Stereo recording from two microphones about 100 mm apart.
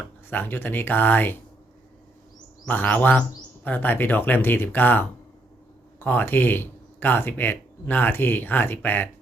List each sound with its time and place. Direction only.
0.3 s speech: 20° left (ahead or behind)
2.6 s speech: 15° left (ahead or behind)